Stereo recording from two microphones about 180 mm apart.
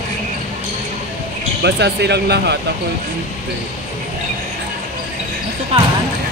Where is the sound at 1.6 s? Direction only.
70° right (ahead or behind).